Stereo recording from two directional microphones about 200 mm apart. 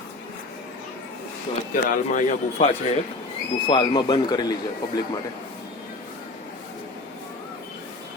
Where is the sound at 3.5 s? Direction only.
25° left (ahead or behind).